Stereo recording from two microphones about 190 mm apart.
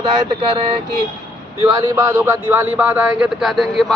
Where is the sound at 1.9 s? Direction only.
15° right (ahead or behind).